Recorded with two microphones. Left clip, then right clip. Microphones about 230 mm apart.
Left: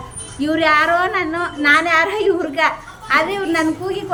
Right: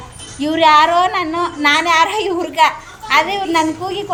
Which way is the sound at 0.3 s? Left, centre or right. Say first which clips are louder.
Right 4 dB; centre.